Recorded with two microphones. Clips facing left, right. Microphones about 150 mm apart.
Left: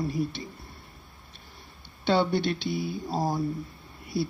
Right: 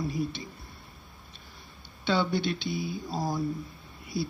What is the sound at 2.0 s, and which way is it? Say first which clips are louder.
Speech: left 3 dB; 60° left (ahead or behind).